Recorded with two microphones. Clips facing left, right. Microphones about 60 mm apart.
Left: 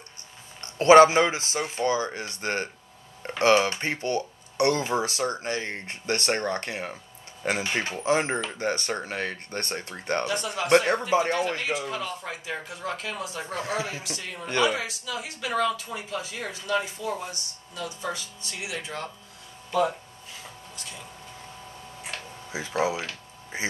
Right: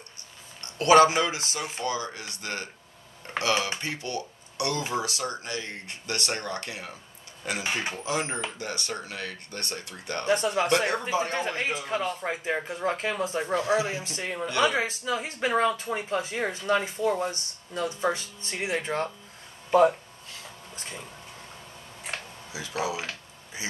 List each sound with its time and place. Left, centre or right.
0.6 s speech: left
10.2 s speech: right
10.9 s speech: left
11.3 s speech: right
14.4 s speech: left
14.7 s speech: right
20.7 s a sound: right
22.5 s speech: left